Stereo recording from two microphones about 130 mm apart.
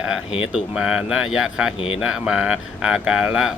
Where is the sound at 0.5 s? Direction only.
5° right (ahead or behind).